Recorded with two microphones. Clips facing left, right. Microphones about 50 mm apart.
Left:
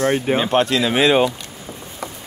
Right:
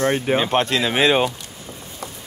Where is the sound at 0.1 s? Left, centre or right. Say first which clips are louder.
Left 1 dB; centre.